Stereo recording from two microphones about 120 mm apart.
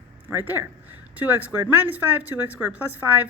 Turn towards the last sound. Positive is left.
turn(degrees=-15)  # may be behind; listen again after turning